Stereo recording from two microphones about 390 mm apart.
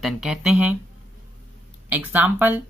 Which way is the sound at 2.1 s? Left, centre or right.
Centre.